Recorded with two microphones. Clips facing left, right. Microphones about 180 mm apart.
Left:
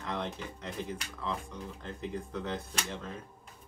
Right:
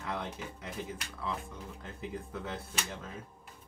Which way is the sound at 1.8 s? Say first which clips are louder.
Left 3 dB; 5° right (ahead or behind).